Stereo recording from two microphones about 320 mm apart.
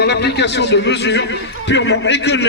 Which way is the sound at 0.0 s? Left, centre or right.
Left.